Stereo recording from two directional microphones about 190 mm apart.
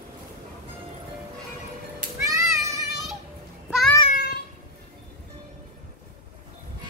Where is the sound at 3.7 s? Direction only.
Centre (ahead or behind).